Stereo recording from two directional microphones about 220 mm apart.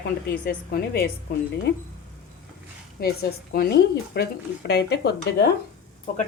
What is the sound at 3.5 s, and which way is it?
A woman's voice, 45° left (ahead or behind).